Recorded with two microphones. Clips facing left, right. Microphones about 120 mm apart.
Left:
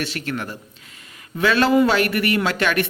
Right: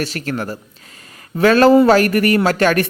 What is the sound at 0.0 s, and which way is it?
Speech, 40° right (ahead or behind).